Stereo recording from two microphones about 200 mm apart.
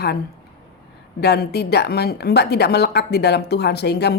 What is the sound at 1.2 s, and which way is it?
Speech, 55° left (ahead or behind).